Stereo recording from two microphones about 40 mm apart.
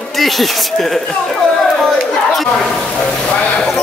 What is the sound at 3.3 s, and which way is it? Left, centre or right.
Speech, left.